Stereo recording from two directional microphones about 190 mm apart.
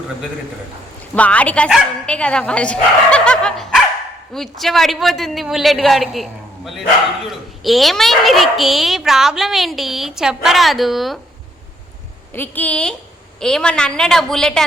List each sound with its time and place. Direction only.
1.1 s a woman's voice: 5° left (ahead or behind)
7.3 s a woman's voice: centre (ahead or behind)
12.3 s a woman's voice: 10° left (ahead or behind)